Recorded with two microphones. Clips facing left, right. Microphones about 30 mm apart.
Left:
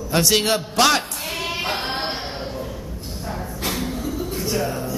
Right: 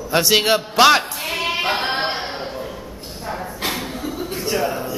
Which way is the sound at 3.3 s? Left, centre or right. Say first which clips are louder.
Right 3 dB; right.